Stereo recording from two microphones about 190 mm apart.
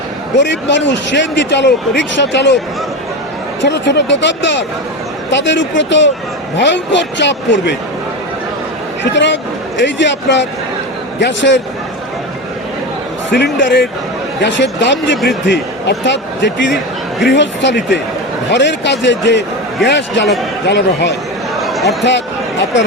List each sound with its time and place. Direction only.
0.3 s a man's voice: 70° left (ahead or behind)
3.6 s a man's voice: 65° left (ahead or behind)
9.1 s a man's voice: 70° left (ahead or behind)
13.3 s a man's voice: 65° left (ahead or behind)
21.6 s a sound: centre (ahead or behind)